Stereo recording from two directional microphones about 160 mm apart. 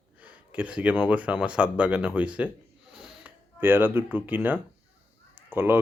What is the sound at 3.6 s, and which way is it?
Speech, 15° right (ahead or behind).